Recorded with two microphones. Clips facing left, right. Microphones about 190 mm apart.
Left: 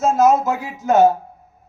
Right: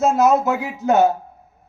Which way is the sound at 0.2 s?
65° right (ahead or behind).